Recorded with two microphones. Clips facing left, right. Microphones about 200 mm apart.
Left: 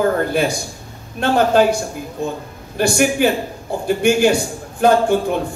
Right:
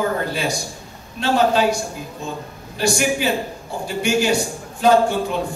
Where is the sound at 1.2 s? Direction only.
55° left (ahead or behind).